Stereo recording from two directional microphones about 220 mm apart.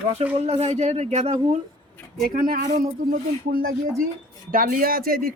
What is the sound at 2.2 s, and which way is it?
Speech, 40° right (ahead or behind).